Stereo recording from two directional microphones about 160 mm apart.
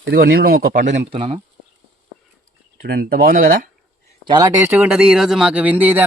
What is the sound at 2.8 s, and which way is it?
Speech, 75° right (ahead or behind).